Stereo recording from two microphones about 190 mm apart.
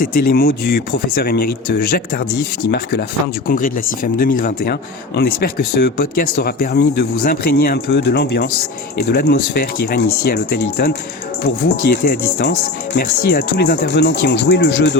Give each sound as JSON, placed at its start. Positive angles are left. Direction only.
{"t": 0.0, "sound": "speech", "side_deg": 50}
{"t": 3.4, "sound": "speech", "side_deg": 45}